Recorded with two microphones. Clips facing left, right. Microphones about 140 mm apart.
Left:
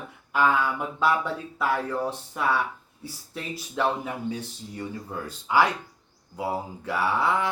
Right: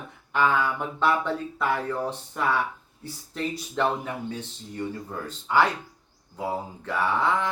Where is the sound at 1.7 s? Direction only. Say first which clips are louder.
Left 1 dB; 5° left (ahead or behind).